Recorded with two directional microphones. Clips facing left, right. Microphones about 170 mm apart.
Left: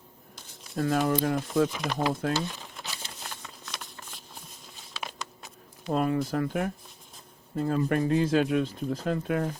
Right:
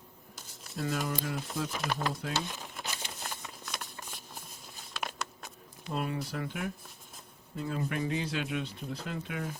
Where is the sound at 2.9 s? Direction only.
15° right (ahead or behind).